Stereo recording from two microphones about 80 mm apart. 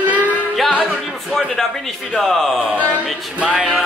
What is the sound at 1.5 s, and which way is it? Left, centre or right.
Speech, centre.